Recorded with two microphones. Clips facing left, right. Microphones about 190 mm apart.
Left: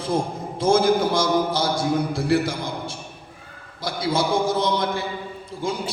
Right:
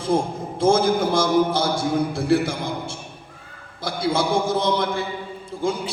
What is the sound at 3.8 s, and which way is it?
A man's voice, 55° right (ahead or behind).